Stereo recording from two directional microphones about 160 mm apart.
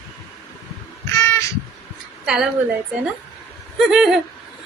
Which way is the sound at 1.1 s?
15° left (ahead or behind).